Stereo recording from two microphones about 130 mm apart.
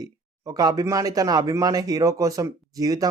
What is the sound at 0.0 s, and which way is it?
Speech, 30° right (ahead or behind).